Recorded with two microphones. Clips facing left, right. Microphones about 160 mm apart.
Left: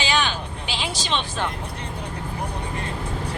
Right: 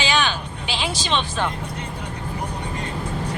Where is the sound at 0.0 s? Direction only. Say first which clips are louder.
Right 2 dB; 85° right.